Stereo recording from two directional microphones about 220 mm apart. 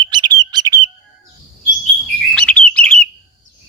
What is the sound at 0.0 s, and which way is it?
Bird, 20° right (ahead or behind).